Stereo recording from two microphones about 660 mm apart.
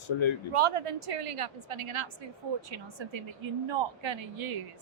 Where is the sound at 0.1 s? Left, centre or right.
Left.